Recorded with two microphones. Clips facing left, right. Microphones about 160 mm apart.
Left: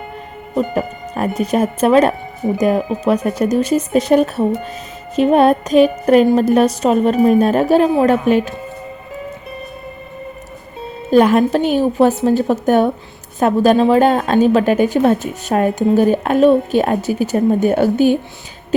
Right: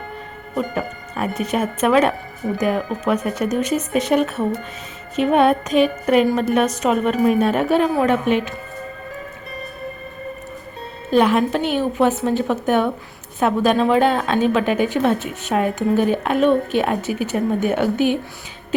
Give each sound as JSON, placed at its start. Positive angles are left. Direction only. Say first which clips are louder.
{"t": 0.5, "sound": "a woman's voice", "louder": "left 5 dB", "side_deg": 35}
{"t": 11.1, "sound": "a woman's voice", "louder": "left 5 dB", "side_deg": 45}